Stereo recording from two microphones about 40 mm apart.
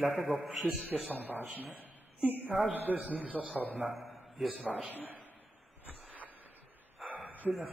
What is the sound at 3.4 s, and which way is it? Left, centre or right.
Speech, right.